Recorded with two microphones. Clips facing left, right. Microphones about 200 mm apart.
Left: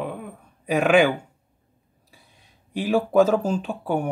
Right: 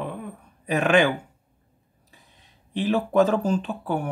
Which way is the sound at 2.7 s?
10° left (ahead or behind).